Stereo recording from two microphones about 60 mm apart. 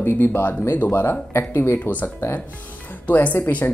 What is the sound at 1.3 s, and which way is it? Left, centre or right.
Speech, left.